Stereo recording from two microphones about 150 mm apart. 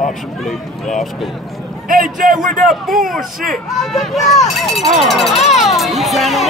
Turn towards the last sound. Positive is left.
turn(degrees=0)  # may be behind; listen again after turning